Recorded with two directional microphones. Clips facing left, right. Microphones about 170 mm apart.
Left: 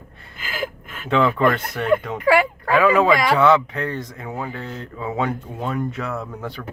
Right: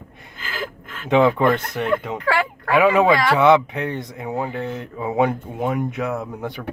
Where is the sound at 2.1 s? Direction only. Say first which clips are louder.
Left 5 dB; 10° left (ahead or behind).